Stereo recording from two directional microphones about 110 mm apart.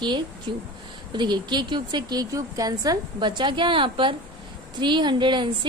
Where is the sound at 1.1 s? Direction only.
45° right (ahead or behind).